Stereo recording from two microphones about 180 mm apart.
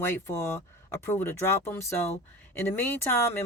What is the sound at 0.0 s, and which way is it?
Speech, 15° left (ahead or behind).